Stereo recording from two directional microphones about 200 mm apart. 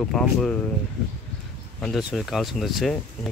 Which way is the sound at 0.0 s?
5° left (ahead or behind).